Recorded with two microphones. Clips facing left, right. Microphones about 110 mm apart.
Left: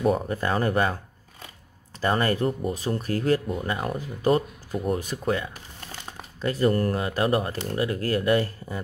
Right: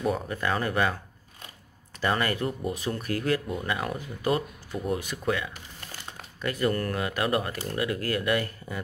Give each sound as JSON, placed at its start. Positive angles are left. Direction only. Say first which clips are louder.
{"t": 0.1, "sound": "speech", "louder": "left 4 dB", "side_deg": 35}
{"t": 2.0, "sound": "speech", "louder": "left 3 dB", "side_deg": 35}